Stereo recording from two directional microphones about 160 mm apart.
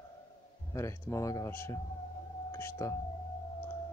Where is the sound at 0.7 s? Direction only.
20° left (ahead or behind).